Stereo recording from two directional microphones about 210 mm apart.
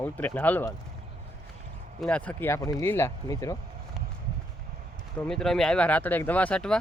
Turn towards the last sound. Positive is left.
turn(degrees=5)  # may be behind; listen again after turning